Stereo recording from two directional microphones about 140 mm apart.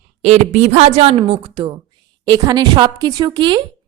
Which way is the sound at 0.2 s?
50° right (ahead or behind).